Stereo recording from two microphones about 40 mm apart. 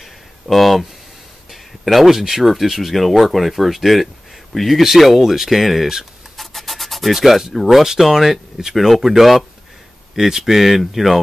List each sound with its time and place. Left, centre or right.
0.0 s a sound: centre
1.5 s speech: centre
6.3 s rub: centre
7.5 s speech: centre
7.8 s speech: centre